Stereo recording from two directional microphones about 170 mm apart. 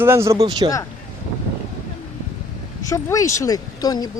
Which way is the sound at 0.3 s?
35° right (ahead or behind).